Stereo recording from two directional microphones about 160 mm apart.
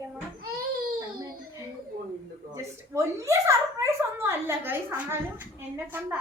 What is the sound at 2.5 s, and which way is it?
A woman's voice, 20° right (ahead or behind).